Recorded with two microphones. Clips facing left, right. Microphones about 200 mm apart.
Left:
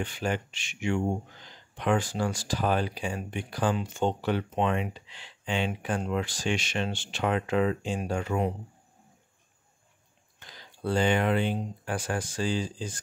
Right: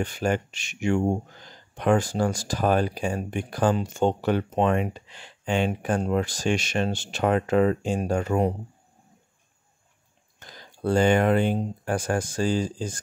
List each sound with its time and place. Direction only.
0.0 s speech: 45° right (ahead or behind)
10.4 s speech: 45° right (ahead or behind)